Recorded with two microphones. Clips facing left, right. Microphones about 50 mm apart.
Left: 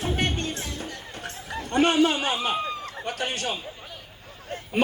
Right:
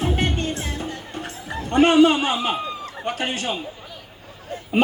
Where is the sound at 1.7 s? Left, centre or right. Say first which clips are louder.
Right 6 dB; right.